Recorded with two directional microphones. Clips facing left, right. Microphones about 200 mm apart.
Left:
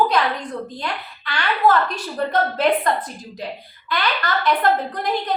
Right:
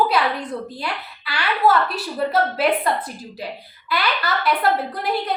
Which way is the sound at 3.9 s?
5° right (ahead or behind).